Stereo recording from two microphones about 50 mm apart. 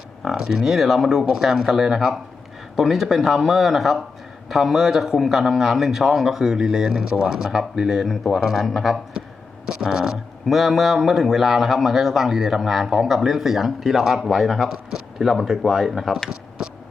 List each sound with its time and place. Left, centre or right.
0.3 s a man's voice: centre